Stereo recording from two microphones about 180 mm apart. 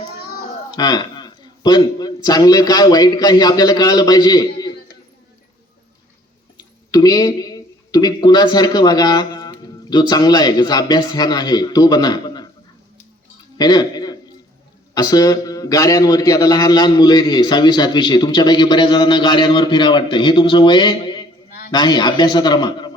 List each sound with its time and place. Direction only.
0.8 s a man's voice: 20° left (ahead or behind)
6.9 s a man's voice: 20° left (ahead or behind)
13.6 s a man's voice: 20° left (ahead or behind)